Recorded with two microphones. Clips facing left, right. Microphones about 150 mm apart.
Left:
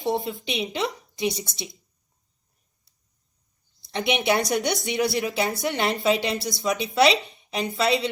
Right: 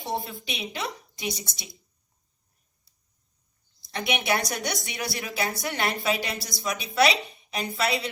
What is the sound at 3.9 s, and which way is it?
A woman's voice, 25° left (ahead or behind).